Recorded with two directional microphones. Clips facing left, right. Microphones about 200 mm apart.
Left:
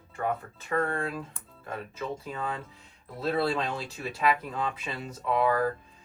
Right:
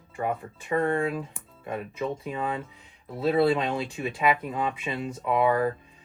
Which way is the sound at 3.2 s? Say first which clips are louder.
Right 5 dB; centre (ahead or behind).